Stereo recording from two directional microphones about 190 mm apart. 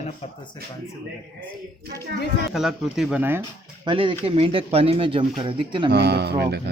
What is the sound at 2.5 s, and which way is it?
Speech, centre (ahead or behind).